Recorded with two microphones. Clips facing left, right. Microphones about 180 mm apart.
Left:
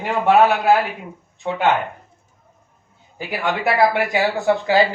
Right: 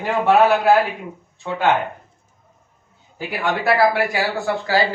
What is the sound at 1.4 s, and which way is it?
Speech, 25° left (ahead or behind).